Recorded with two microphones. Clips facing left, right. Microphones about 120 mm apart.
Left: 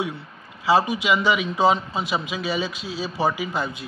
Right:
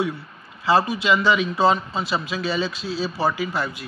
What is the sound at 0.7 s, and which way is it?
A man's voice, 15° left (ahead or behind).